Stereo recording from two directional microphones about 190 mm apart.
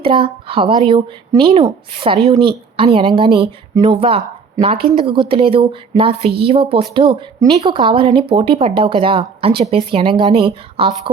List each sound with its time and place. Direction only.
0.0 s a woman's voice: 30° right (ahead or behind)